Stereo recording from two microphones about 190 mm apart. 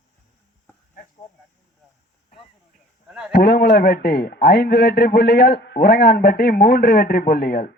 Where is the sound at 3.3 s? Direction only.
55° left (ahead or behind).